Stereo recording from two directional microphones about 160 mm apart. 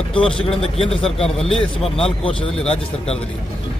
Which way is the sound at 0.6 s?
5° left (ahead or behind).